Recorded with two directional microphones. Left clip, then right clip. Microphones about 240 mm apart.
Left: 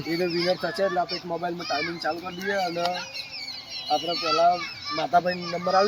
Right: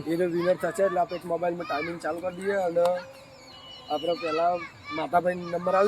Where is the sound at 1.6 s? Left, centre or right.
Centre.